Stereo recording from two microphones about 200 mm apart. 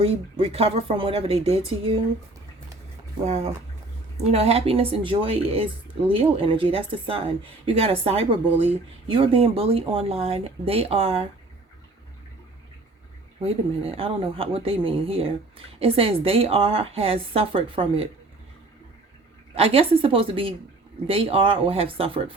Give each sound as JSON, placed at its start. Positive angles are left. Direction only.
{"t": 0.0, "sound": "speech", "side_deg": -30}
{"t": 3.2, "sound": "speech", "side_deg": -30}
{"t": 13.4, "sound": "speech", "side_deg": -30}
{"t": 19.5, "sound": "speech", "side_deg": -30}